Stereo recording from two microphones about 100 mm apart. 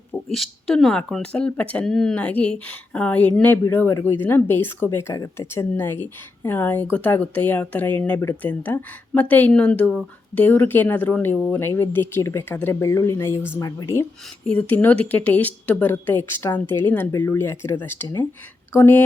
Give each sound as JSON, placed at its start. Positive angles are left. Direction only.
{"t": 0.3, "sound": "speech", "side_deg": 0}
{"t": 3.6, "sound": "speech", "side_deg": 25}
{"t": 5.1, "sound": "speech", "side_deg": 40}
{"t": 5.5, "sound": "speech", "side_deg": 25}
{"t": 13.6, "sound": "speech", "side_deg": 35}
{"t": 14.4, "sound": "speech", "side_deg": 15}